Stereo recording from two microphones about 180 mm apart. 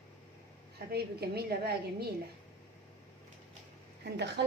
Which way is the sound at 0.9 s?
60° right (ahead or behind).